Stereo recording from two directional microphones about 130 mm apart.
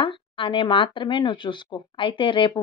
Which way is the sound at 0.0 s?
40° left (ahead or behind).